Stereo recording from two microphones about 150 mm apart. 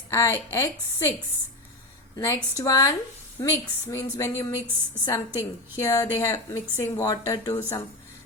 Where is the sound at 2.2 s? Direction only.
20° left (ahead or behind).